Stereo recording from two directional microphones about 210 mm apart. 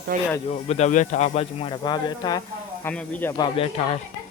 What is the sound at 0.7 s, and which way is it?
Speech, 35° left (ahead or behind).